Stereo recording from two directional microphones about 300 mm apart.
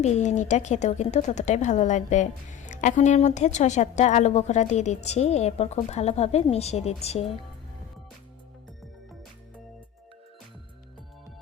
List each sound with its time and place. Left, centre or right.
0.0 s speech: left